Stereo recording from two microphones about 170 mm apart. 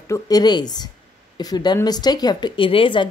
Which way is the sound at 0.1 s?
25° left (ahead or behind).